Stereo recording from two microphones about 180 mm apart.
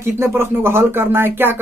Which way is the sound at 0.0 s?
15° right (ahead or behind).